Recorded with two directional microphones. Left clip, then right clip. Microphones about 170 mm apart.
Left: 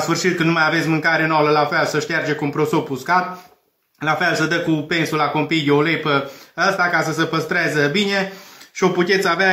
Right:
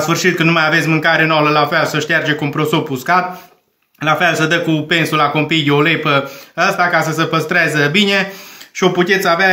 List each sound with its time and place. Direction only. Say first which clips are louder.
0.0 s a man's voice: right 5 dB; 45° right (ahead or behind)